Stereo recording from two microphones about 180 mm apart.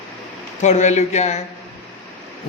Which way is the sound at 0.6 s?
40° left (ahead or behind).